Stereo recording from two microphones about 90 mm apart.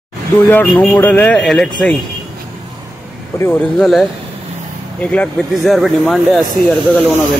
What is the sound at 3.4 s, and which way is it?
Speech, 25° left (ahead or behind).